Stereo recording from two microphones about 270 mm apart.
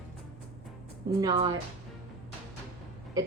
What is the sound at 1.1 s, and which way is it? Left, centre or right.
Speech, centre.